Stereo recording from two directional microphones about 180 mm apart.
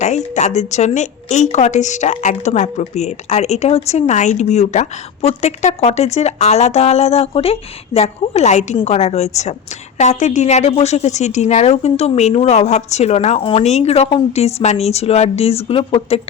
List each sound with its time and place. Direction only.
0.0 s a woman's voice: 40° left (ahead or behind)